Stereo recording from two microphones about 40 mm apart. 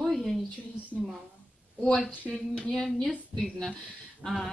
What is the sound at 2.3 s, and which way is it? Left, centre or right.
Speech, centre.